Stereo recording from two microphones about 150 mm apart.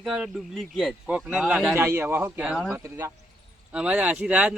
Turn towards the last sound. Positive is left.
turn(degrees=-10)  # may be behind; listen again after turning